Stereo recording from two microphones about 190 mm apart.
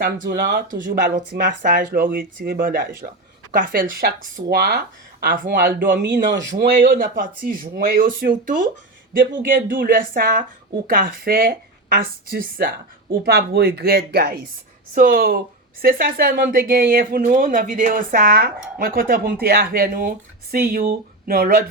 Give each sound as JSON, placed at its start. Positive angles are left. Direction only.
{"t": 0.0, "sound": "speech", "side_deg": -55}